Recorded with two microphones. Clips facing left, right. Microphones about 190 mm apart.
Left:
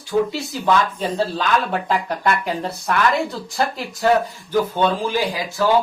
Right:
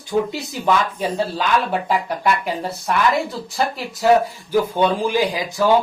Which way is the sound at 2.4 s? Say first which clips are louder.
Even; centre (ahead or behind).